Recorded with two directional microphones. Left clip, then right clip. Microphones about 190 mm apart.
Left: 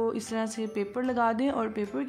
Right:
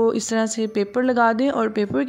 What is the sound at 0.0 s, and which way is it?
Speech, 35° right (ahead or behind).